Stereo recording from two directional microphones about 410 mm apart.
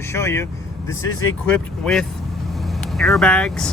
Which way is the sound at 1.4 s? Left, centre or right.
Centre.